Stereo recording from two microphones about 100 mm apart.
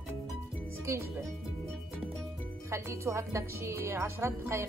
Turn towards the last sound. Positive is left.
turn(degrees=-25)  # may be behind; listen again after turning